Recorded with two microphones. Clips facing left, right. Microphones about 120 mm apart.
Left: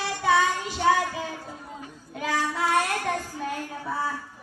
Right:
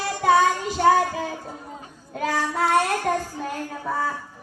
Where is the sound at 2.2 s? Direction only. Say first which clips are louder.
Right 3 dB; 45° right (ahead or behind).